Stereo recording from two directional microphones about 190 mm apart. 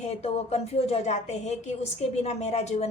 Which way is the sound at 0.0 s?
35° left (ahead or behind).